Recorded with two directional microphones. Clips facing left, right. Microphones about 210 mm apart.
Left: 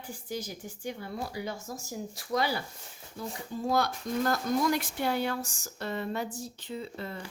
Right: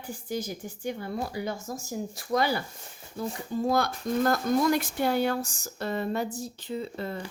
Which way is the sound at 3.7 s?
50° right (ahead or behind).